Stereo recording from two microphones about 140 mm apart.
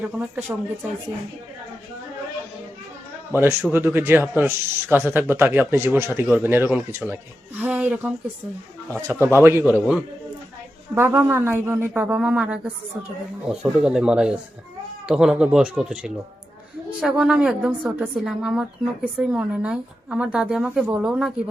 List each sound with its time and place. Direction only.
0.3 s a man's voice: 15° right (ahead or behind)
3.3 s a man's voice: 15° right (ahead or behind)
8.9 s speech: 15° left (ahead or behind)
9.1 s a man's voice: 20° right (ahead or behind)
10.9 s a man's voice: 15° right (ahead or behind)